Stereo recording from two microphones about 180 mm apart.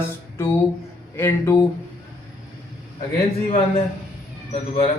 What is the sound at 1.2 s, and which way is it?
Speech, 15° left (ahead or behind).